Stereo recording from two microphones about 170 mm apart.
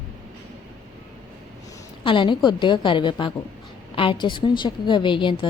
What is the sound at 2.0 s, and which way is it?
A woman's voice, 30° left (ahead or behind).